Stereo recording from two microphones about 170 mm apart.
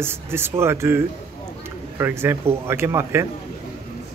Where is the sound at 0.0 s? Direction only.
15° right (ahead or behind).